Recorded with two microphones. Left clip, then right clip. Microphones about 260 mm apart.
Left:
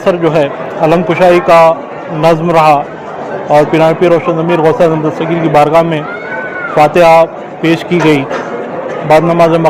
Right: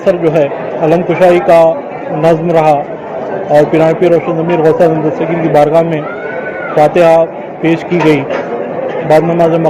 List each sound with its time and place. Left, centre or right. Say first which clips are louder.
0.0 s a man's voice: even; left